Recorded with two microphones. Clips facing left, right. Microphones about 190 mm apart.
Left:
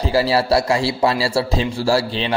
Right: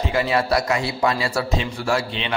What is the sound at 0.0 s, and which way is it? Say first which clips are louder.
A man's voice: left 4 dB; 35° left (ahead or behind).